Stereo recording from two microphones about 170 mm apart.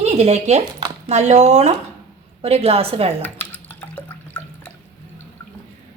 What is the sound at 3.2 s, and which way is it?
Drip, 10° left (ahead or behind).